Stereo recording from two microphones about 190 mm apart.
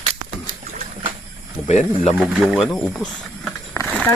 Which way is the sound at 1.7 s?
35° left (ahead or behind).